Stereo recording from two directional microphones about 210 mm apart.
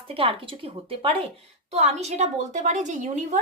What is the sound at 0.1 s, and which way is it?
A woman's voice, 25° right (ahead or behind).